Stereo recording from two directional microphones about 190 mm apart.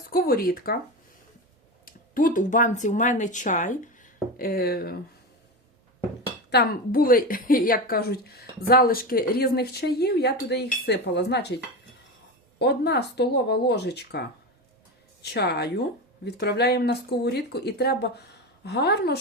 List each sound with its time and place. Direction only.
0.1 s speech: 50° left (ahead or behind)
1.8 s speech: 45° left (ahead or behind)
6.5 s a woman's voice: 55° left (ahead or behind)
12.5 s a woman's voice: 60° left (ahead or behind)